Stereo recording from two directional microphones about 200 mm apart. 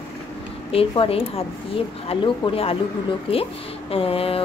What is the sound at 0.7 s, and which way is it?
Speech, 30° left (ahead or behind).